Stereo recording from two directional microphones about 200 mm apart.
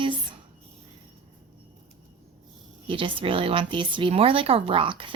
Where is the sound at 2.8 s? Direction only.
25° right (ahead or behind).